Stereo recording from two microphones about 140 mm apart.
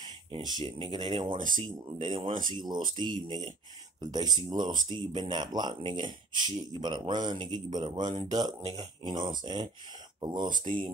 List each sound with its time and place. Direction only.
0.0 s speech: 30° right (ahead or behind)
2.2 s speech: 70° right (ahead or behind)
2.5 s speech: 30° right (ahead or behind)